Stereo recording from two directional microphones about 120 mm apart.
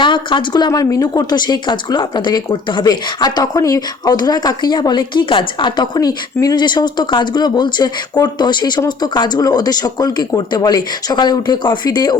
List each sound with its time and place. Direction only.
0.0 s speech: 40° left (ahead or behind)